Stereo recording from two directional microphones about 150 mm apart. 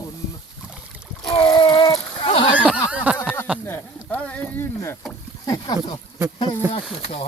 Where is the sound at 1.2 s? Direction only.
5° left (ahead or behind).